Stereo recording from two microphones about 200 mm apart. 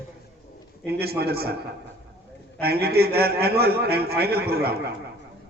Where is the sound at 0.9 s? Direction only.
50° right (ahead or behind).